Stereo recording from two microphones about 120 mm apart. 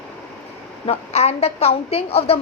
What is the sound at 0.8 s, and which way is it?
A woman's voice, 60° left (ahead or behind).